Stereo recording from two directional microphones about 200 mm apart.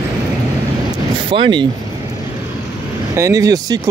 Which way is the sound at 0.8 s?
25° right (ahead or behind).